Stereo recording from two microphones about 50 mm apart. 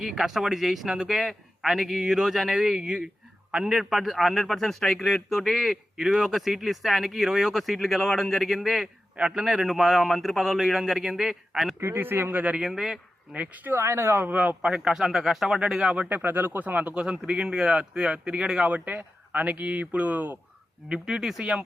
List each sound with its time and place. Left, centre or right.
0.0 s speech: centre
6.0 s speech: centre
9.1 s speech: centre
11.8 s speech: right
12.6 s speech: centre
13.3 s speech: right
13.7 s speech: right
14.3 s speech: right
14.6 s speech: right
14.9 s speech: centre
16.0 s speech: right
17.0 s speech: right
18.7 s speech: right
21.0 s speech: centre